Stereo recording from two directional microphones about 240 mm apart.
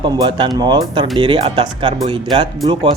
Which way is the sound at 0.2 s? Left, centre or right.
Centre.